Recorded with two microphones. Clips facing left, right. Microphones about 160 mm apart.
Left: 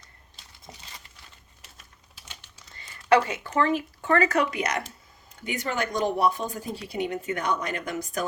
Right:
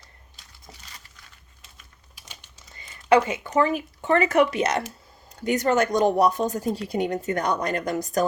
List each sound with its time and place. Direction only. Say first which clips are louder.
2.9 s speech: right 2 dB; 20° right (ahead or behind)
5.4 s a woman's voice: right 8 dB; 40° right (ahead or behind)